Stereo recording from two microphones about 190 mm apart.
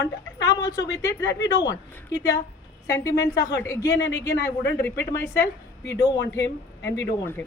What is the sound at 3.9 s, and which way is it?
Speech, 65° left (ahead or behind).